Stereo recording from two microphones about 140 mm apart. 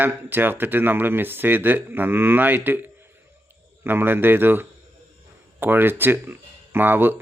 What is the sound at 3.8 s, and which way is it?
Speech, 15° right (ahead or behind).